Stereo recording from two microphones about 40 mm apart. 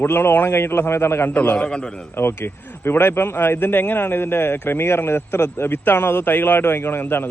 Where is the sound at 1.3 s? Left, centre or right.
Left.